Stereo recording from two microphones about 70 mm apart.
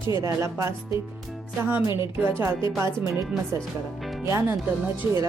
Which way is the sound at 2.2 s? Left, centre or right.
Right.